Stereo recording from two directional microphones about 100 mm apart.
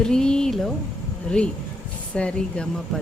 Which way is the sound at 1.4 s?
10° left (ahead or behind).